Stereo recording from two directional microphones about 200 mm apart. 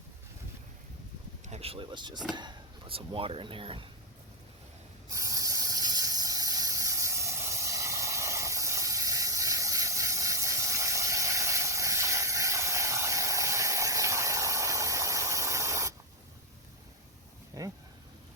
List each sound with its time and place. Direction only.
1.5 s speech: 30° right (ahead or behind)
5.1 s hiss: 15° right (ahead or behind)
17.6 s vehicle: 15° right (ahead or behind)